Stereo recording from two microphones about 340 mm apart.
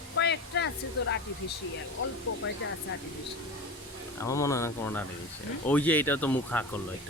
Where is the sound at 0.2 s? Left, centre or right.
Left.